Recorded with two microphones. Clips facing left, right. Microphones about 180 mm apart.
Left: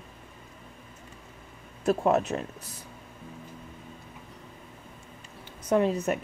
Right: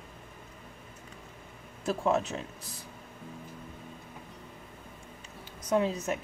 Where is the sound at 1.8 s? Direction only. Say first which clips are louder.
Left 4 dB; 60° left (ahead or behind).